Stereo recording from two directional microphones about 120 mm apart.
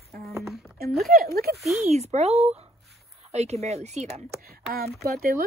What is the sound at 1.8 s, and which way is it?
Speech, 65° right (ahead or behind).